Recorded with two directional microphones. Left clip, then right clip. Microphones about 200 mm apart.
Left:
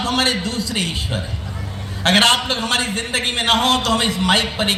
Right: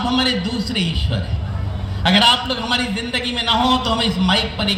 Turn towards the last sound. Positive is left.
turn(degrees=-45)  # may be behind; listen again after turning